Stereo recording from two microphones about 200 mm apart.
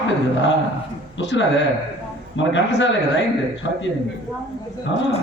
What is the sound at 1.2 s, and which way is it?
A man's voice, 65° left (ahead or behind).